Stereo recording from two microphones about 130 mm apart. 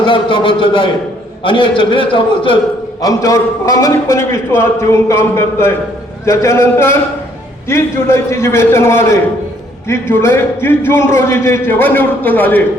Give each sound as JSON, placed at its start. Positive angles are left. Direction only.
{"t": 0.0, "sound": "a man's voice", "side_deg": 40}
{"t": 3.0, "sound": "a man's voice", "side_deg": 25}